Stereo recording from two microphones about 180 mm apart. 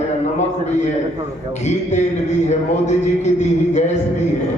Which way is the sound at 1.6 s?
40° left (ahead or behind).